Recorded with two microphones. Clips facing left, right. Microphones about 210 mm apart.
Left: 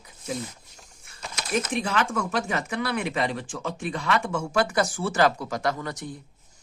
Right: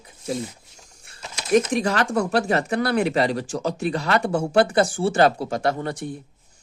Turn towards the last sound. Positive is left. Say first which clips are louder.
# right 4 dB
turn(degrees=-30)  # may be behind; listen again after turning